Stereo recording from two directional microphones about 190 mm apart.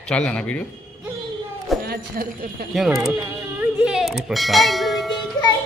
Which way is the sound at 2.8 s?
Centre (ahead or behind).